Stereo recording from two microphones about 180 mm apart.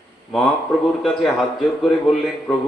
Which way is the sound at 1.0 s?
Centre (ahead or behind).